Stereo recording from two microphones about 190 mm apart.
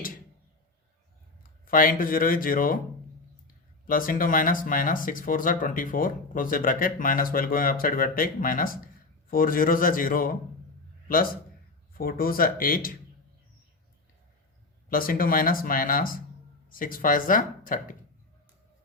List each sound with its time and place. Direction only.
1.6 s speech: 45° left (ahead or behind)
11.9 s speech: 50° left (ahead or behind)
14.8 s speech: 50° left (ahead or behind)